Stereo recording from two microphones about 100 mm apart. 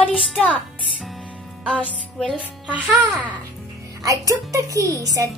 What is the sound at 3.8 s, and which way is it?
Speech, 35° right (ahead or behind).